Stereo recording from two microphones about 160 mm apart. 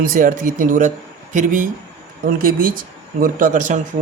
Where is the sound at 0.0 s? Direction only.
60° right (ahead or behind).